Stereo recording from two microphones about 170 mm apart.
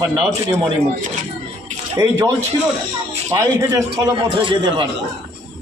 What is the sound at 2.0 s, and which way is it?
A man's voice, 20° right (ahead or behind).